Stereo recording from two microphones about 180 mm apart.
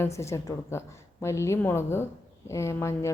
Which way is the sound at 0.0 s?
15° left (ahead or behind).